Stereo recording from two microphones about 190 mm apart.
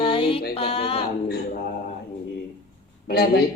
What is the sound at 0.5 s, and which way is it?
Speech, 30° left (ahead or behind).